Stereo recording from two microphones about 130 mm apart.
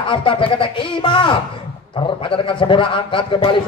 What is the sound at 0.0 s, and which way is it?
A man's voice, 40° left (ahead or behind).